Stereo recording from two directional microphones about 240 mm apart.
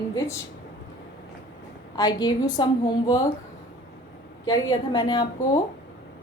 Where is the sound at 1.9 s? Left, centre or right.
Centre.